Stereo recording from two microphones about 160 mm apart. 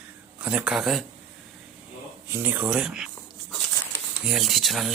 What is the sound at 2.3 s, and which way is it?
Speech, 10° right (ahead or behind).